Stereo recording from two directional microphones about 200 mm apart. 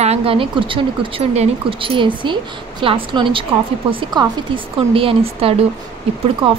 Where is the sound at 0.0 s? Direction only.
30° right (ahead or behind).